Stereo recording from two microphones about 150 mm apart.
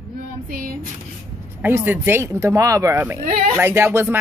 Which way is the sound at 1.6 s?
15° right (ahead or behind).